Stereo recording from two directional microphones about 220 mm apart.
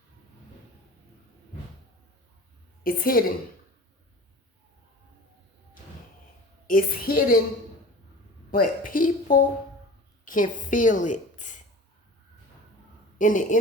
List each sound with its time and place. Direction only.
2.8 s a woman's voice: 40° left (ahead or behind)
6.7 s a woman's voice: 40° left (ahead or behind)
8.4 s a woman's voice: 40° left (ahead or behind)
13.1 s speech: 35° left (ahead or behind)